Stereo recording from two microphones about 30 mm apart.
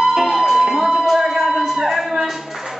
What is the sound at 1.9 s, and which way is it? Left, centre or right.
Music, centre.